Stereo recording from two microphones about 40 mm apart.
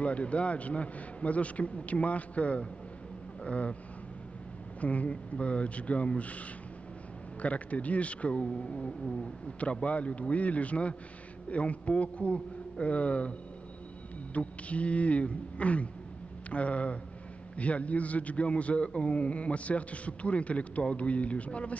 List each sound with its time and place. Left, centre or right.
0.0 s a man's voice: left
4.7 s a man's voice: left
7.4 s a man's voice: left
14.3 s a man's voice: left